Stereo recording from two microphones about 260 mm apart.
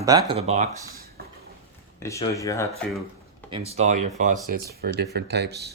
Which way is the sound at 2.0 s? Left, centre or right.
Centre.